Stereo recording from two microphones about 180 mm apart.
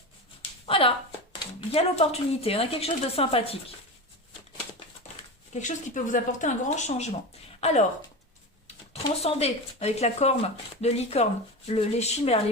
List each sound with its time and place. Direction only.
0.6 s a sound: 30° left (ahead or behind)
1.7 s a woman's voice: 35° left (ahead or behind)
5.5 s a woman's voice: 45° left (ahead or behind)
9.2 s a woman's voice: 35° left (ahead or behind)